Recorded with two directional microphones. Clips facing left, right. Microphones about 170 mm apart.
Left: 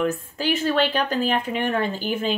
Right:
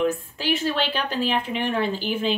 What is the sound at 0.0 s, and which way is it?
Speech, 45° left (ahead or behind).